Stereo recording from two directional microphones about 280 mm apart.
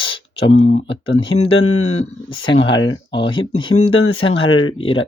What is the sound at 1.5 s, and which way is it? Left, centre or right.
Speech, left.